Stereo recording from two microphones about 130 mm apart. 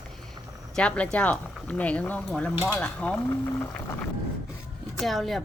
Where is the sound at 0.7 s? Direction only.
10° left (ahead or behind).